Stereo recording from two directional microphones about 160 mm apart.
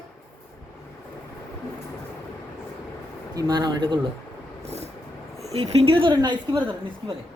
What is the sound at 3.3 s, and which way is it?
Speech, 25° right (ahead or behind).